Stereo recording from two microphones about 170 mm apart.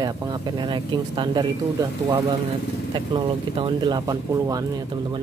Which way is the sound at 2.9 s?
30° right (ahead or behind).